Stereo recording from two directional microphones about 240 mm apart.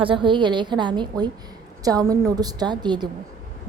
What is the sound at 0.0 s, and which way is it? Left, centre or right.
A woman's voice, right.